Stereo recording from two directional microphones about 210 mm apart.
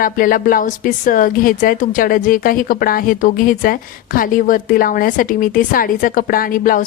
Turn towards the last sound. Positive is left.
turn(degrees=40)  # may be behind; listen again after turning